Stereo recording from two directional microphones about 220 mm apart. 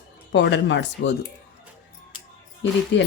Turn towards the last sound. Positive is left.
turn(degrees=55)  # may be behind; listen again after turning